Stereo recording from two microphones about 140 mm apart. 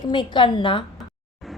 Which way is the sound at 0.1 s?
35° left (ahead or behind).